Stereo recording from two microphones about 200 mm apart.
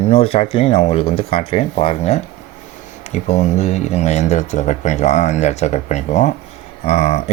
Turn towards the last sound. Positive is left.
turn(degrees=30)  # may be behind; listen again after turning